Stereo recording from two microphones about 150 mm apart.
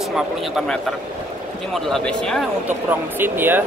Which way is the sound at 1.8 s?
Centre (ahead or behind).